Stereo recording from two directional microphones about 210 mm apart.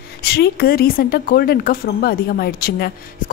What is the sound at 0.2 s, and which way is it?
A woman's voice, 50° left (ahead or behind).